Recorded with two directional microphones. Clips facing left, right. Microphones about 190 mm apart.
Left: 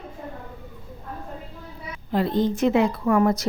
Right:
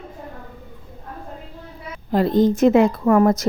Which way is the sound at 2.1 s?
40° right (ahead or behind).